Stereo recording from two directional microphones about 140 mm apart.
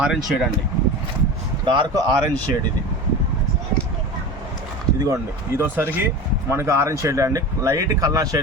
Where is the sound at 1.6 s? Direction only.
35° right (ahead or behind).